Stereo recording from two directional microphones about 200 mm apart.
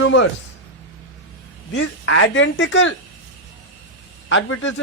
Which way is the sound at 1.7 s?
85° left.